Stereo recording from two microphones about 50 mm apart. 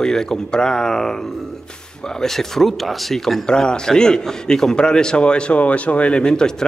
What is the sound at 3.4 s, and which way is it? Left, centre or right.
A man's voice, centre.